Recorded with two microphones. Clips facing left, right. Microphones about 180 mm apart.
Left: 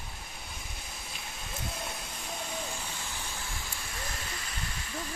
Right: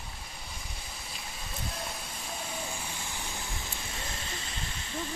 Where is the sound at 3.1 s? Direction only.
20° right (ahead or behind).